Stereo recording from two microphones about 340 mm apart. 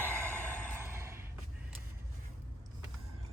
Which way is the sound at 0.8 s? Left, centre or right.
Centre.